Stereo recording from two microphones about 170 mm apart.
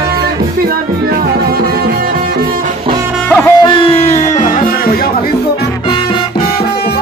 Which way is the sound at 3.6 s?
35° left (ahead or behind).